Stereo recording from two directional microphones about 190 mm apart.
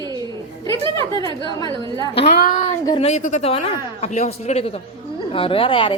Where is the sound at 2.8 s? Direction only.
30° left (ahead or behind).